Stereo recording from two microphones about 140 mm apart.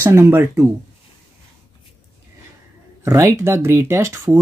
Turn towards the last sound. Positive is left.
turn(degrees=-20)  # may be behind; listen again after turning